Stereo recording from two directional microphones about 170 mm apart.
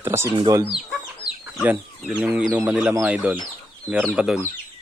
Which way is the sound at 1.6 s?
10° right (ahead or behind).